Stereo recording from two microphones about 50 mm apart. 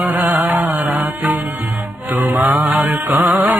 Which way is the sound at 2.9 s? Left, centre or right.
Right.